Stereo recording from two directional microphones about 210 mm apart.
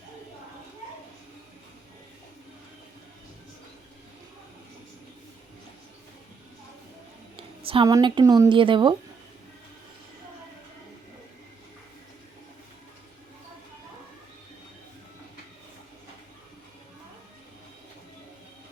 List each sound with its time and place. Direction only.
7.3 s speech: 25° right (ahead or behind)